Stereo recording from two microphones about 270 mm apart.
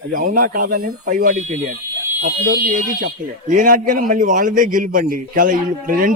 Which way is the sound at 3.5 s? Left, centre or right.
Right.